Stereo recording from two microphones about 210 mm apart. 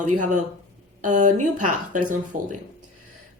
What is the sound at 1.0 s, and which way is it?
Speech, 35° right (ahead or behind).